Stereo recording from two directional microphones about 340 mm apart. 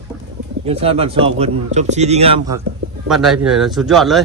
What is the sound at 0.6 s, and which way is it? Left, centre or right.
Speech, centre.